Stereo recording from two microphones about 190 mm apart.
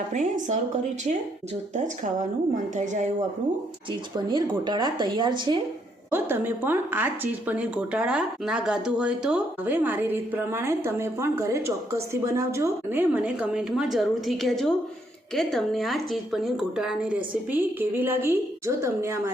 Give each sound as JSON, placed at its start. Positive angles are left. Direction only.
{"t": 0.1, "sound": "speech", "side_deg": -40}
{"t": 1.7, "sound": "speech", "side_deg": -40}
{"t": 4.1, "sound": "speech", "side_deg": -25}
{"t": 6.1, "sound": "a woman's voice", "side_deg": -10}